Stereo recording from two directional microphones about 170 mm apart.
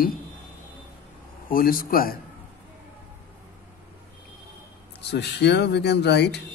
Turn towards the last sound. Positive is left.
turn(degrees=85)